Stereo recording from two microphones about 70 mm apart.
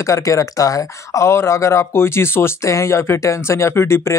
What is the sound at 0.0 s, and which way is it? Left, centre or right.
Speech, left.